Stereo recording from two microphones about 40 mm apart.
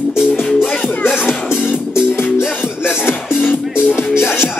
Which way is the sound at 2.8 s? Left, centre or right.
Left.